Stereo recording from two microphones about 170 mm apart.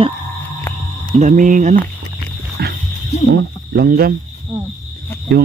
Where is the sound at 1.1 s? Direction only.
45° right (ahead or behind).